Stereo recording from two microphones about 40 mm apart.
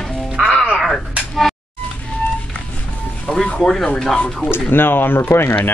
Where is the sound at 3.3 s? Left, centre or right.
Centre.